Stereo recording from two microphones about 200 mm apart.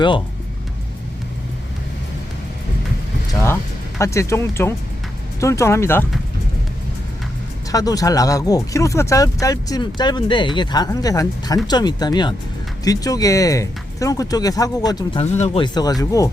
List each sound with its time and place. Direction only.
3.4 s speech: 15° left (ahead or behind)
7.7 s speech: 15° left (ahead or behind)